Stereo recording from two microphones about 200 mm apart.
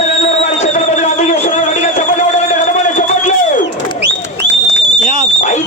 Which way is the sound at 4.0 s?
60° right (ahead or behind).